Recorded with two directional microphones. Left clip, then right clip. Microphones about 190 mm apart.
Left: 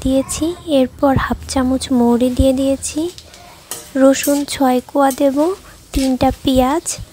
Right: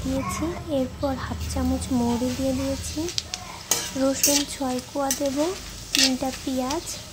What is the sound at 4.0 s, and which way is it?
A woman's voice, 40° left (ahead or behind).